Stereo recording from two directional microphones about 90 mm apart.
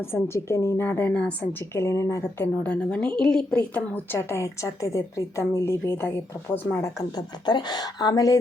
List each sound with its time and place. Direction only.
0.0 s a woman's voice: 30° left (ahead or behind)
1.7 s speech: 30° left (ahead or behind)
2.4 s a woman's voice: 10° left (ahead or behind)
6.8 s speech: 45° left (ahead or behind)